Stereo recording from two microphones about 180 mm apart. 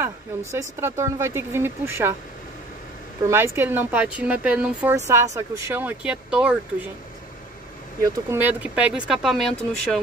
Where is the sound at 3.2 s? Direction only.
15° right (ahead or behind).